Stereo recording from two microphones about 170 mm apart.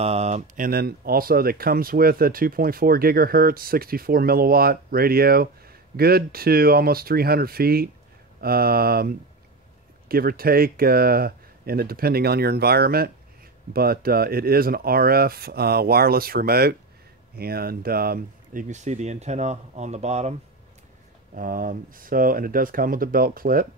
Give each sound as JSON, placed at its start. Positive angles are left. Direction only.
{"t": 0.0, "sound": "speech", "side_deg": -40}
{"t": 0.6, "sound": "speech", "side_deg": -60}
{"t": 21.4, "sound": "speech", "side_deg": -55}